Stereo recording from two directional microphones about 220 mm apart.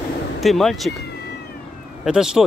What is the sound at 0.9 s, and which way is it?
Cat, 45° left (ahead or behind).